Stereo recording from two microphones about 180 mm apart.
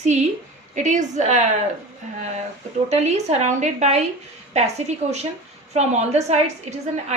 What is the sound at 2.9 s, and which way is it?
A woman's voice, 40° right (ahead or behind).